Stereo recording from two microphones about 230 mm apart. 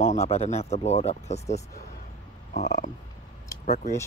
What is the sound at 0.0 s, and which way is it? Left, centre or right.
Speech, left.